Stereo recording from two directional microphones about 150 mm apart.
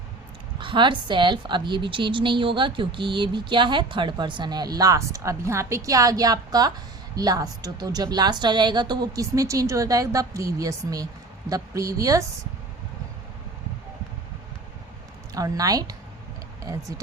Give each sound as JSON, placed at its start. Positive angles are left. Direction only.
{"t": 0.6, "sound": "a woman's voice", "side_deg": -35}
{"t": 15.4, "sound": "a woman's voice", "side_deg": -25}